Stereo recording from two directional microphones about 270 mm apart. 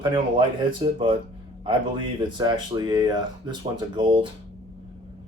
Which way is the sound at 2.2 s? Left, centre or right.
Centre.